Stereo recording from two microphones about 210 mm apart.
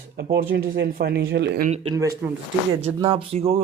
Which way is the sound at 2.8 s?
25° right (ahead or behind).